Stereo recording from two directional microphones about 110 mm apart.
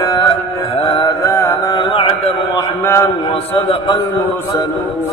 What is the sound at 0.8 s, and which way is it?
Mantra, 50° left (ahead or behind).